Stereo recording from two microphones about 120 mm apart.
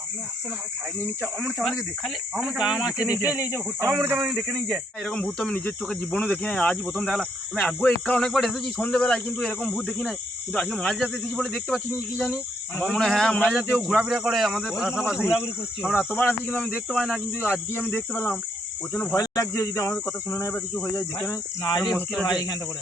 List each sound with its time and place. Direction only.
1.4 s speech: centre (ahead or behind); by 3.9 s 20° right (ahead or behind)
4.2 s speech: centre (ahead or behind)
16.1 s speech: 15° left (ahead or behind)
16.9 s speech: centre (ahead or behind)
17.3 s speech: 20° left (ahead or behind)
19.1 s speech: 30° left (ahead or behind)
20.9 s cricket: 30° left (ahead or behind)